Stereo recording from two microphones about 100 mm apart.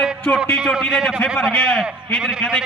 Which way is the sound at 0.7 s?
Centre (ahead or behind).